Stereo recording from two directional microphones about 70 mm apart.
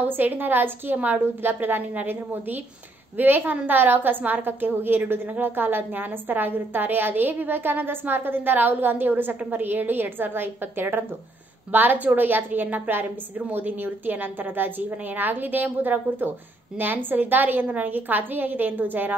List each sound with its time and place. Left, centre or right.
0.1 s a woman's voice: right